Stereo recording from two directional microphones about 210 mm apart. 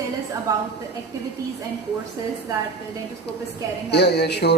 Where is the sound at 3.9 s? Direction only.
55° left (ahead or behind).